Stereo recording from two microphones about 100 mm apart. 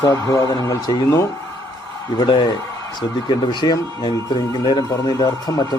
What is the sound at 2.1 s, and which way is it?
Speech, 50° left (ahead or behind).